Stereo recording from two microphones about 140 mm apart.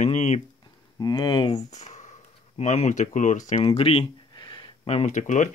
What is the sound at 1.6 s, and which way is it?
Speech, 55° left (ahead or behind).